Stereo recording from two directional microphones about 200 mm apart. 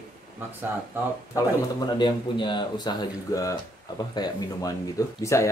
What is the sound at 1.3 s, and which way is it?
Speech, 20° left (ahead or behind).